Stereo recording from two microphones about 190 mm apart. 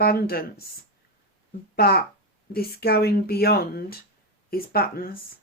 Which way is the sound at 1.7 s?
55° left (ahead or behind).